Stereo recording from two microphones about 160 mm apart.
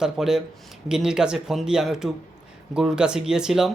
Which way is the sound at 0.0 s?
5° right (ahead or behind).